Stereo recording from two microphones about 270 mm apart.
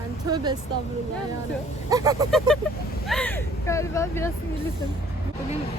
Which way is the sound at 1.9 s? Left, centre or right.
Centre.